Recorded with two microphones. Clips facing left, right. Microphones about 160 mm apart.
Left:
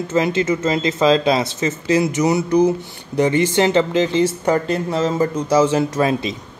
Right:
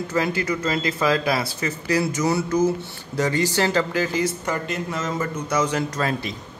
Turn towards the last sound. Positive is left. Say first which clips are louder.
# left 7 dB
turn(degrees=20)  # may be behind; listen again after turning